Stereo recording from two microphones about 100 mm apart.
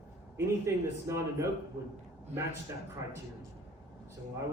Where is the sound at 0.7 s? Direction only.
25° right (ahead or behind).